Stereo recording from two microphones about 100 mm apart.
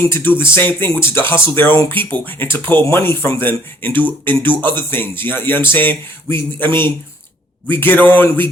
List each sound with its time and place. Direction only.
0.0 s speech: 20° left (ahead or behind)